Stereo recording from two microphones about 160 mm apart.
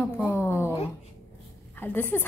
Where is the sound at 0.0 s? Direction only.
15° left (ahead or behind).